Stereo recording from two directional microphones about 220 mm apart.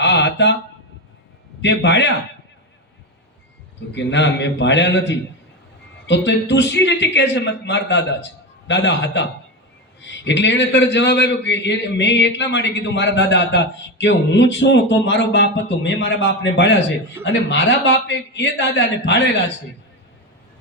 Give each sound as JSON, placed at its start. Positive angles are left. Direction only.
{"t": 0.0, "sound": "a sound", "side_deg": 55}
{"t": 1.6, "sound": "a man's voice", "side_deg": 55}
{"t": 3.9, "sound": "a man's voice", "side_deg": 55}